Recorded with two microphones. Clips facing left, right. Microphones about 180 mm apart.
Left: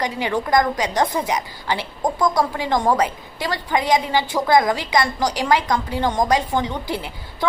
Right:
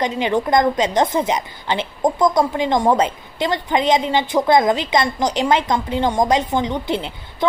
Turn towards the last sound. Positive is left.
turn(degrees=-20)  # may be behind; listen again after turning